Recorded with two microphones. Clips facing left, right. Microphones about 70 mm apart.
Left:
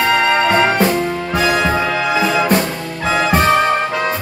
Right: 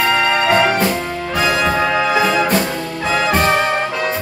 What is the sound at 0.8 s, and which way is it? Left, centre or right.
Music, centre.